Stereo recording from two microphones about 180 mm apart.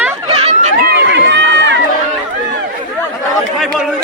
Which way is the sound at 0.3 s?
30° right (ahead or behind).